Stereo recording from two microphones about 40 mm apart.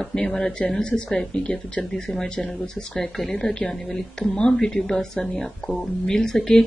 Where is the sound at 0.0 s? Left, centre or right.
Centre.